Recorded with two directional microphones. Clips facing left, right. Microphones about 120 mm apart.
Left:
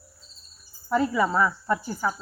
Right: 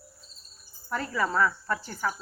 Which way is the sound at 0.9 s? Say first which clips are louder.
Left 6 dB; 15° left (ahead or behind).